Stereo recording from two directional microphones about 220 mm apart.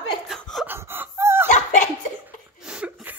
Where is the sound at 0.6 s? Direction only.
10° right (ahead or behind).